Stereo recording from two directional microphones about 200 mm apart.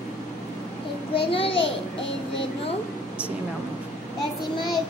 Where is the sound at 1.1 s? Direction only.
25° left (ahead or behind).